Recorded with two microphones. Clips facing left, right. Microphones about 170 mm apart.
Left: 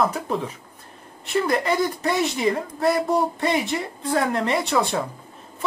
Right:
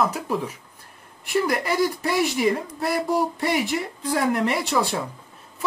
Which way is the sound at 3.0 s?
25° left (ahead or behind).